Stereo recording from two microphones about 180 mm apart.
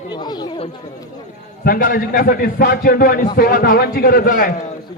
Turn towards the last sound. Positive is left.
turn(degrees=50)  # may be behind; listen again after turning